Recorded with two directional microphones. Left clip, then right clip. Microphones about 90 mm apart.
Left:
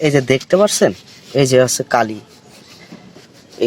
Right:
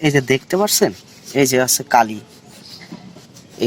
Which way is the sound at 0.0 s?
40° left (ahead or behind).